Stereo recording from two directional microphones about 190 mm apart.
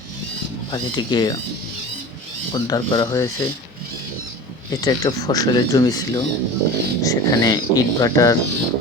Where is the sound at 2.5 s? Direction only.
20° left (ahead or behind).